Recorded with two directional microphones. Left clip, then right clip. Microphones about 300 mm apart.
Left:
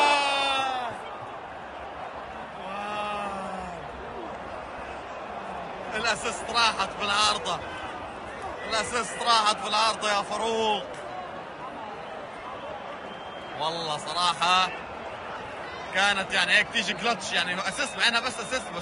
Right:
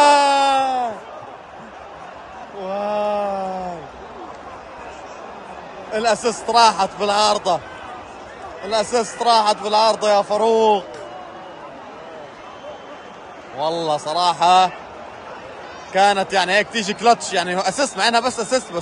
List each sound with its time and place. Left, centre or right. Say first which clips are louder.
0.0 s groan: right 10 dB; right
2.8 s a sound: right 11 dB; right
5.9 s a man's voice: right 10 dB; right
8.6 s a man's voice: right 9 dB; right
13.6 s a man's voice: right 9 dB; right
15.9 s a man's voice: right 9 dB; right